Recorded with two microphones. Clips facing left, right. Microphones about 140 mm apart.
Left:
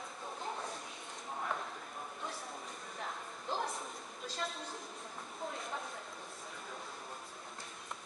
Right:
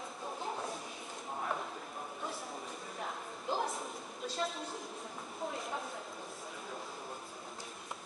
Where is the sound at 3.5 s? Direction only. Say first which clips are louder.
Right 3 dB; centre (ahead or behind).